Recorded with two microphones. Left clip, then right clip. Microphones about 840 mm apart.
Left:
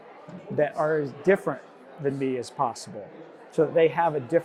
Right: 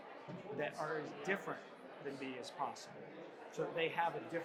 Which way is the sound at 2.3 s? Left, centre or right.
Left.